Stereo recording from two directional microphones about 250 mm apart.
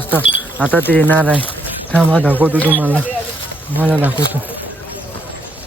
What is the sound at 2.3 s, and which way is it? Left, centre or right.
Speech, centre.